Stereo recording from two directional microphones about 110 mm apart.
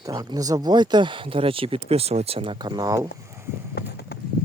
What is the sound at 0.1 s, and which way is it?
Speech, 35° right (ahead or behind).